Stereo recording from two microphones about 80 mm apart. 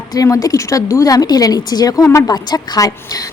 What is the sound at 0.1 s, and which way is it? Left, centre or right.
Speech, left.